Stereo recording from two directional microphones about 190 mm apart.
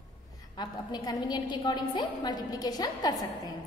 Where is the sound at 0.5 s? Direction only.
20° left (ahead or behind).